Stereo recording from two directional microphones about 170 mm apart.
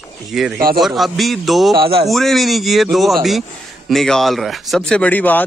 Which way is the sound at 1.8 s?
65° right (ahead or behind).